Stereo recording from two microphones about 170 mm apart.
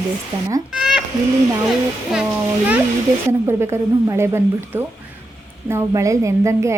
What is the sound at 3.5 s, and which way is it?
A woman's voice, 15° right (ahead or behind).